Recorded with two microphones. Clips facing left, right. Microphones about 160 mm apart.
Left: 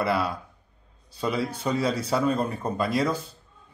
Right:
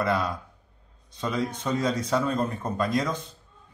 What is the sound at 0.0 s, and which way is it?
A man's voice, 5° left (ahead or behind).